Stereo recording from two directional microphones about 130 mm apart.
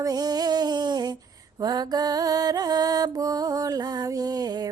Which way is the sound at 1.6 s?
30° right (ahead or behind).